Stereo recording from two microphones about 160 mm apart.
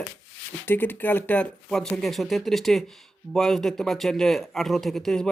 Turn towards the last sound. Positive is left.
turn(degrees=5)  # may be behind; listen again after turning